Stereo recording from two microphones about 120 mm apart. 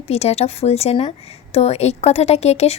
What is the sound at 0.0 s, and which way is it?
A woman's voice, 60° left (ahead or behind).